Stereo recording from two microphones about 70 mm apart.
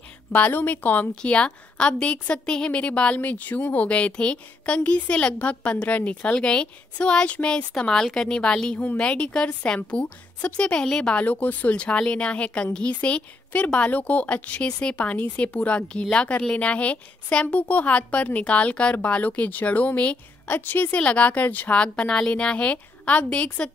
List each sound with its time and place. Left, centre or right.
0.3 s a woman's voice: left